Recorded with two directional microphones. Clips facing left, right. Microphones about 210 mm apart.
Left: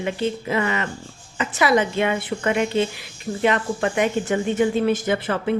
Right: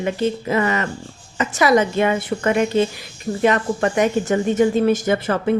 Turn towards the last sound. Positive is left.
turn(degrees=-45)  # may be behind; listen again after turning